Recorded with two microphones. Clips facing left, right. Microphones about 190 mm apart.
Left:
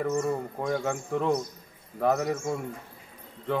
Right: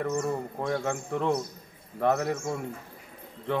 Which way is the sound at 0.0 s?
5° left (ahead or behind).